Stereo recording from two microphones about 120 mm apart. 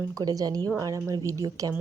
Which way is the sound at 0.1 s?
30° right (ahead or behind).